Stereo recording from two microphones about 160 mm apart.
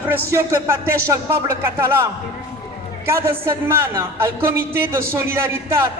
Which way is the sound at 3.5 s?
15° right (ahead or behind).